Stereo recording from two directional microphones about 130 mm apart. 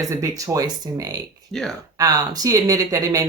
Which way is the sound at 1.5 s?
Centre (ahead or behind).